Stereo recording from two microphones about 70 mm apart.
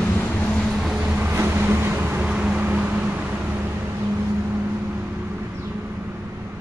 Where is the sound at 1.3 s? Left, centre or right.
Right.